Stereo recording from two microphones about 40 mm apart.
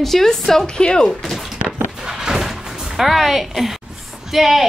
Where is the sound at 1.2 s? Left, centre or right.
Centre.